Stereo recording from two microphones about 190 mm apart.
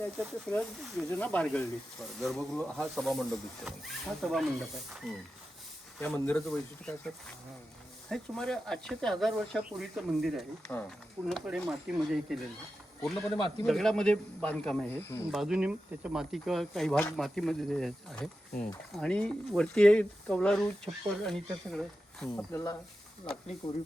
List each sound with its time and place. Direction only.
0.4 s speech: 5° left (ahead or behind)
10.7 s speech: 10° left (ahead or behind)
11.3 s speech: centre (ahead or behind)
15.3 s speech: centre (ahead or behind)
22.5 s speech: 15° left (ahead or behind)
23.2 s speech: 25° left (ahead or behind)